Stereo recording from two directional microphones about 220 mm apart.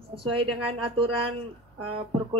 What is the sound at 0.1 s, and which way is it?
A woman's voice, 25° right (ahead or behind).